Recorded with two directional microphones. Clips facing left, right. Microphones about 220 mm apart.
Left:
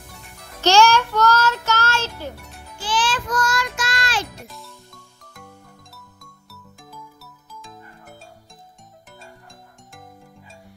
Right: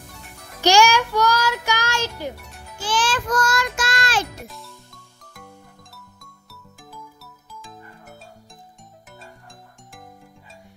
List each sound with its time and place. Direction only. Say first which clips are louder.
0.6 s music: left 1 dB; 15° right (ahead or behind)
2.8 s child singing: right 1 dB; 45° right (ahead or behind)
4.5 s music: even; centre (ahead or behind)
6.5 s music: even; centre (ahead or behind)